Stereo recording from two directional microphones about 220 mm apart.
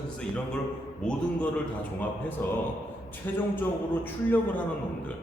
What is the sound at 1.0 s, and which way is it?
A man's voice, 5° left (ahead or behind).